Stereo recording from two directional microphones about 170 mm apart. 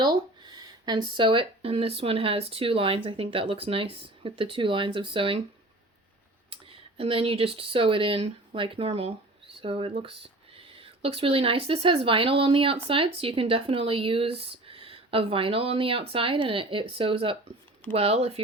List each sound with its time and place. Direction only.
0.0 s speech: 25° right (ahead or behind)
6.5 s speech: 35° right (ahead or behind)